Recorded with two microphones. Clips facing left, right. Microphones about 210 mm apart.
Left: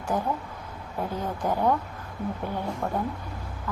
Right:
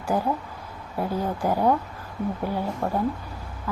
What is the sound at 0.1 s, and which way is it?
Speech, 10° right (ahead or behind).